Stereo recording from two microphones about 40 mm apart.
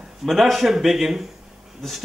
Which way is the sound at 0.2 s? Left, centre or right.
Centre.